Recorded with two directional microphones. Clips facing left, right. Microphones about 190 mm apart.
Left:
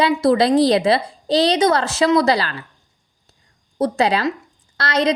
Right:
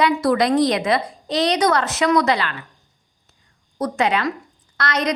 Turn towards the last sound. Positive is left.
turn(degrees=30)  # may be behind; listen again after turning